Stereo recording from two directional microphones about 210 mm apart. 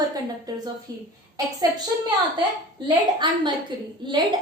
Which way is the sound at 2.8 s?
20° right (ahead or behind).